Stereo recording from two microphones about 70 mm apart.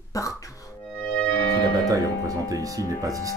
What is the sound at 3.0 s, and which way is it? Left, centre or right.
Speech, right.